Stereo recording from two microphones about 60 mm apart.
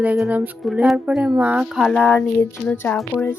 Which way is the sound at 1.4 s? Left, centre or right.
Right.